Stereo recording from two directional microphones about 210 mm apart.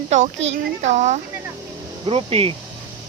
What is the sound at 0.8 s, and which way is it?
Speech, 35° right (ahead or behind).